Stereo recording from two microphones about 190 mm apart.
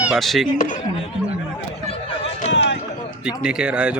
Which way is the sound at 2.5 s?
70° left (ahead or behind).